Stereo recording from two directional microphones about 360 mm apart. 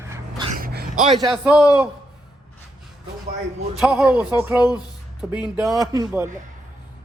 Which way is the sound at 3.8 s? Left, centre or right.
Centre.